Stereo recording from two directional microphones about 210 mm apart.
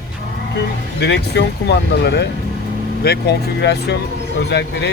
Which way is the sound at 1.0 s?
55° left (ahead or behind).